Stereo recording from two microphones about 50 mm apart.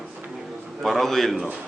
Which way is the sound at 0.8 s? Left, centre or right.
Centre.